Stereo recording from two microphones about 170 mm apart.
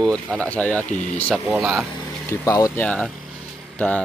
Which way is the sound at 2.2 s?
20° left (ahead or behind).